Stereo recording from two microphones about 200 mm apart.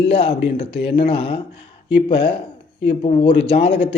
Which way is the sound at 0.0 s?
25° left (ahead or behind).